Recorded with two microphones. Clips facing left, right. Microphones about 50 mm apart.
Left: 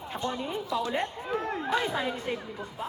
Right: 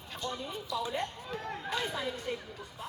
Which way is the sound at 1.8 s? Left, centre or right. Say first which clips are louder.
Left 5 dB; left.